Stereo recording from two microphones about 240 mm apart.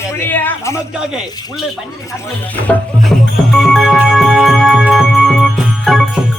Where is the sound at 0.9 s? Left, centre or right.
Centre.